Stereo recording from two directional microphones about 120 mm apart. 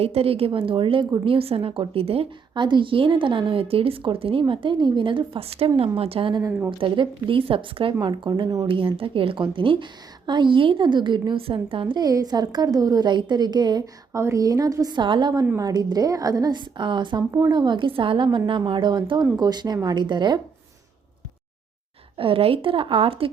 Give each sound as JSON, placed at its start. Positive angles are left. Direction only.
{"t": 0.0, "sound": "a woman's voice", "side_deg": -55}
{"t": 12.0, "sound": "a woman's voice", "side_deg": -30}
{"t": 17.3, "sound": "a woman's voice", "side_deg": -30}
{"t": 22.2, "sound": "a woman's voice", "side_deg": -50}